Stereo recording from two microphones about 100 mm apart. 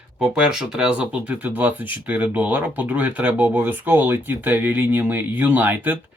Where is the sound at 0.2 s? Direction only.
10° right (ahead or behind).